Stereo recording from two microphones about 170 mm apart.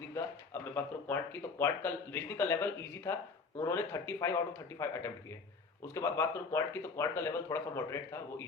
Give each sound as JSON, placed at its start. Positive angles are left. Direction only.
{"t": 0.1, "sound": "speech", "side_deg": 10}